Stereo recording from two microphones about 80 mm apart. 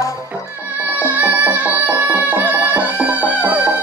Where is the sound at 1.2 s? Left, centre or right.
Right.